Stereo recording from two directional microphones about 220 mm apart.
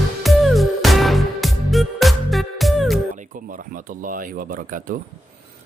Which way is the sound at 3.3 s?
40° right (ahead or behind).